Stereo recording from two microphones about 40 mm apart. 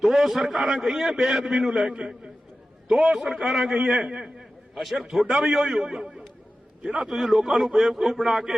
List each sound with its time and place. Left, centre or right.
0.0 s a man's voice: centre
4.8 s a man's voice: centre
7.1 s a man's voice: centre